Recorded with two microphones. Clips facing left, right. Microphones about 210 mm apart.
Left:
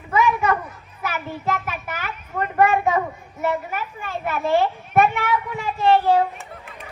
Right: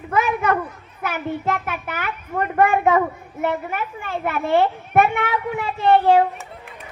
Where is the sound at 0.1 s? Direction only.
60° right (ahead or behind).